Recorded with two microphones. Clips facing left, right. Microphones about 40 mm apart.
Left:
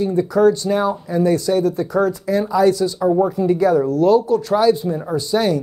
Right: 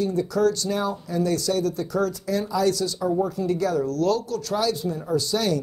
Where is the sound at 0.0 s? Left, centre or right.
Left.